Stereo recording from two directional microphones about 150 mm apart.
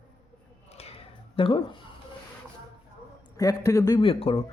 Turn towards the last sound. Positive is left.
turn(degrees=40)  # may be behind; listen again after turning